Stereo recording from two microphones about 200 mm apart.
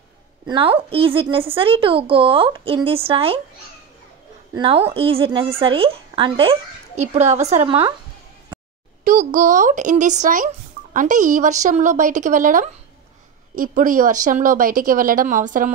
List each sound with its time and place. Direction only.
0.5 s a woman's voice: 25° right (ahead or behind)
4.6 s a woman's voice: 25° right (ahead or behind)
9.0 s speech: 40° right (ahead or behind)